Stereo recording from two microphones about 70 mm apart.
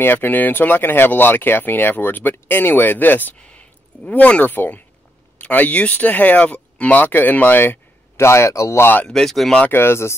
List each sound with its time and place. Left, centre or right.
0.0 s speech: left
9.0 s speech: centre
9.7 s speech: left